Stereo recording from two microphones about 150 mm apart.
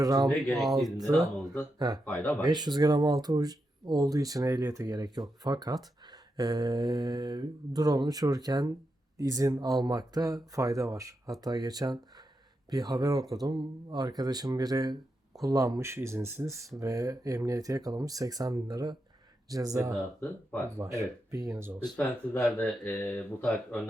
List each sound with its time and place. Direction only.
0.0 s speech: 25° right (ahead or behind)
0.4 s speech: centre (ahead or behind)
0.9 s speech: 25° right (ahead or behind)
2.4 s speech: 30° right (ahead or behind)
21.8 s speech: 10° left (ahead or behind)